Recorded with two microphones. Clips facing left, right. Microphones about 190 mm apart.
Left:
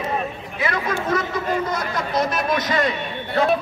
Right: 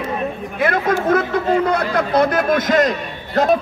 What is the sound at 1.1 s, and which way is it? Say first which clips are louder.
A man's voice: right 5 dB; 55° right (ahead or behind).